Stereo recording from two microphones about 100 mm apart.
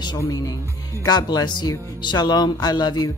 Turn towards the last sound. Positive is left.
turn(degrees=45)  # may be behind; listen again after turning